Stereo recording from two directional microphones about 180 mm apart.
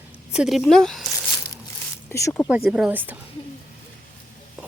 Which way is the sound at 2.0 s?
15° left (ahead or behind).